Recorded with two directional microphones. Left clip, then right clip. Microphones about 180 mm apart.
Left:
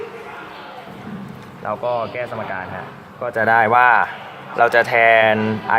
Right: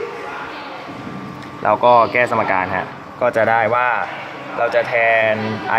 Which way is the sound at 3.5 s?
35° left (ahead or behind).